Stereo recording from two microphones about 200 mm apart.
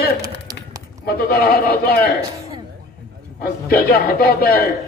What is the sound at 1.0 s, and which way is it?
A man's voice, 50° left (ahead or behind).